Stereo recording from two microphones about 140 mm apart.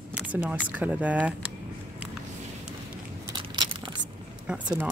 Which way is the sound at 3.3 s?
35° right (ahead or behind).